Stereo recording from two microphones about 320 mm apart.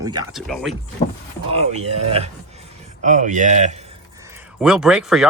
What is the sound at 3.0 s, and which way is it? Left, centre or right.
Speech, right.